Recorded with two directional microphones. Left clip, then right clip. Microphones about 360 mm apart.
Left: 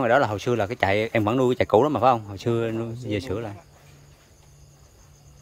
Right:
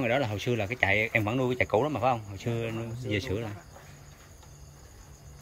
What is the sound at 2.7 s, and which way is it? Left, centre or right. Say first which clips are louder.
Speech: left 6 dB; left.